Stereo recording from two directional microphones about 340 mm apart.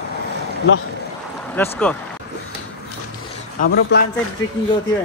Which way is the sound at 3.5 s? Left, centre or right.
Left.